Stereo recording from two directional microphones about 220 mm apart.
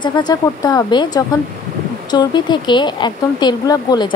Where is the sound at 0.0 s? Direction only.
20° left (ahead or behind).